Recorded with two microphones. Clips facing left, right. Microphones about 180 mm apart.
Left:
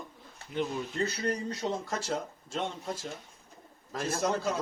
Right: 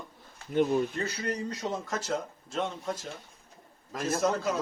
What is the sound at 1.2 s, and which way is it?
Speech, 30° left (ahead or behind).